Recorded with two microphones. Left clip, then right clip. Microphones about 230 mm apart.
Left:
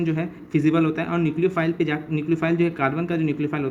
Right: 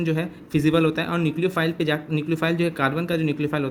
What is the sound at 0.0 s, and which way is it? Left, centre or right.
A man's voice, right.